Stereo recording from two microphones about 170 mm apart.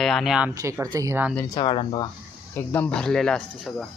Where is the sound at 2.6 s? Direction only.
10° left (ahead or behind).